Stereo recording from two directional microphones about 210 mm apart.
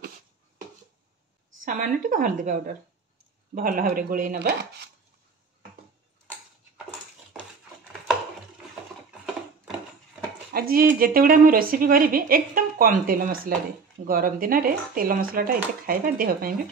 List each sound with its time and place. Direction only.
1.6 s speech: 40° right (ahead or behind)
10.5 s speech: 45° right (ahead or behind)